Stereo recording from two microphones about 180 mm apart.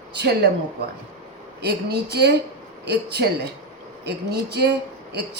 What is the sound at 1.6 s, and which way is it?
A man's voice, 60° right (ahead or behind).